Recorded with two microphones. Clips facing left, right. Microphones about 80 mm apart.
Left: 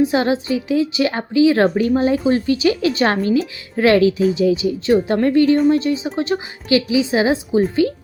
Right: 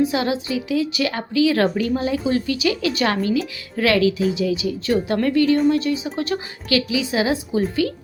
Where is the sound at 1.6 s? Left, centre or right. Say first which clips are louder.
Left 5 dB; left.